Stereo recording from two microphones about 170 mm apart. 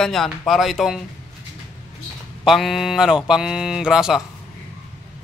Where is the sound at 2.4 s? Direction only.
Centre (ahead or behind).